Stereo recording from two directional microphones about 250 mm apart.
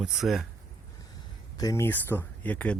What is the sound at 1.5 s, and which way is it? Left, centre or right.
Speech, centre.